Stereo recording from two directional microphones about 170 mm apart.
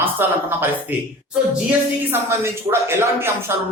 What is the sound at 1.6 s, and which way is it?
Speech, 15° right (ahead or behind).